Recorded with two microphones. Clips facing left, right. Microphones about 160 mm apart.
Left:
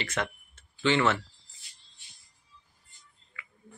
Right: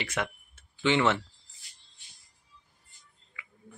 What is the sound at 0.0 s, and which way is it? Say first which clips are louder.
Speech: even; 10° right (ahead or behind).